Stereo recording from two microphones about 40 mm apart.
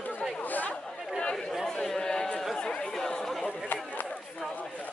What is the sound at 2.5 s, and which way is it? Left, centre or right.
Chatter, left.